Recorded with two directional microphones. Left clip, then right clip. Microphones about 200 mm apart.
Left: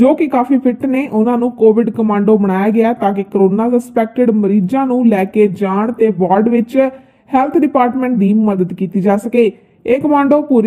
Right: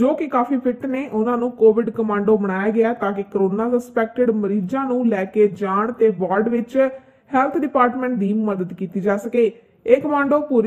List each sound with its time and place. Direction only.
0.0 s speech: 35° left (ahead or behind)